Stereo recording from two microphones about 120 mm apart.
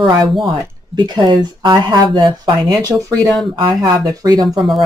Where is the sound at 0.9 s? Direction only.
40° right (ahead or behind).